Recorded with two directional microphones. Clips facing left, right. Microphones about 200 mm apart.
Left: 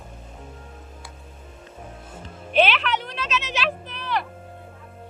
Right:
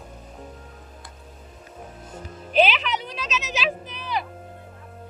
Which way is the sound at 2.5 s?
5° right (ahead or behind).